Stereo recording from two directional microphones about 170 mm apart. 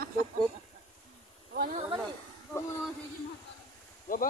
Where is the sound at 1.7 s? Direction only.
35° right (ahead or behind).